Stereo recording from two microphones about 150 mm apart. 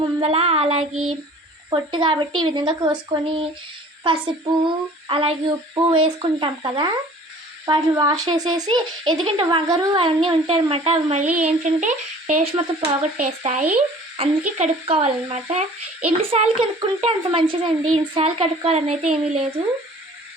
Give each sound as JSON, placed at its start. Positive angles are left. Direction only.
{"t": 0.0, "sound": "a sound", "side_deg": -35}
{"t": 1.7, "sound": "speech", "side_deg": -30}
{"t": 12.5, "sound": "speech", "side_deg": -40}
{"t": 13.1, "sound": "speech", "side_deg": -50}